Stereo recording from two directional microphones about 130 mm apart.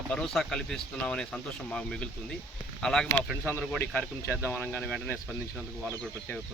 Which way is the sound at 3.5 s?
15° left (ahead or behind).